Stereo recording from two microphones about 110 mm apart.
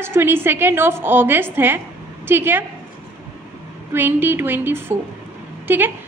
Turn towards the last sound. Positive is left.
turn(degrees=-20)  # may be behind; listen again after turning